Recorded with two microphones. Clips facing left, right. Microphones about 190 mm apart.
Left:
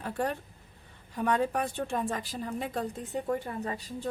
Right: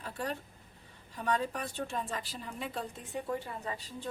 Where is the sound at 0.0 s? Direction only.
55° left (ahead or behind).